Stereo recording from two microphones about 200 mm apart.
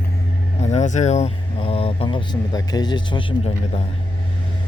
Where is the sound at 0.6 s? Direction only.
35° left (ahead or behind).